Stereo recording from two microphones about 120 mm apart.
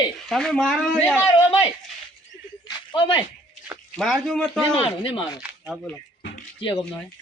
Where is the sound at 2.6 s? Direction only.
40° left (ahead or behind).